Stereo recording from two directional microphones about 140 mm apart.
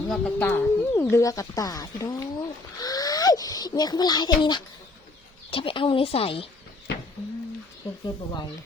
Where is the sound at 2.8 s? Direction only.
25° left (ahead or behind).